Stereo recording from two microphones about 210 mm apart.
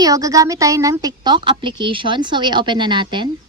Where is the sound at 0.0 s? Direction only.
15° right (ahead or behind).